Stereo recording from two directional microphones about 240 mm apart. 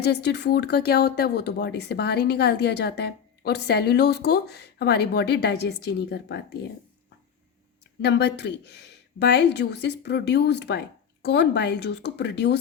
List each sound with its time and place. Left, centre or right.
0.0 s speech: left
8.0 s speech: left